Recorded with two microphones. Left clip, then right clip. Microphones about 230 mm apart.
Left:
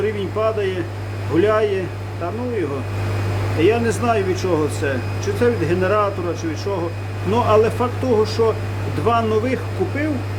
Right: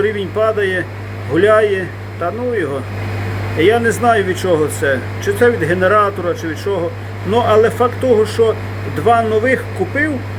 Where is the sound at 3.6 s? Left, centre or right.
Centre.